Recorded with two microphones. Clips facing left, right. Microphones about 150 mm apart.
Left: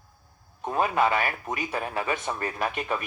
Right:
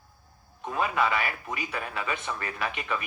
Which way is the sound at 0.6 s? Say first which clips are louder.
Left 3 dB; 45° left (ahead or behind).